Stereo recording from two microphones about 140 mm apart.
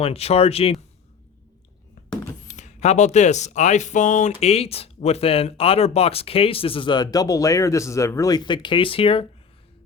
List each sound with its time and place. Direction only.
0.0 s speech: 45° left (ahead or behind)
2.0 s a sound: 65° left (ahead or behind)
2.4 s speech: 60° left (ahead or behind)
4.4 s speech: 50° left (ahead or behind)